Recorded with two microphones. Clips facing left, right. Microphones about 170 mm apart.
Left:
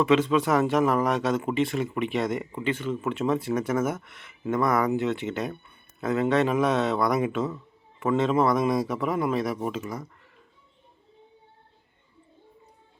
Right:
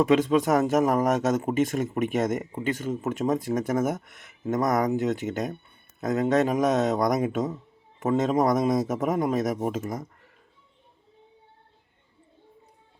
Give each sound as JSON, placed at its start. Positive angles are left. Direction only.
{"t": 0.0, "sound": "speech", "side_deg": -45}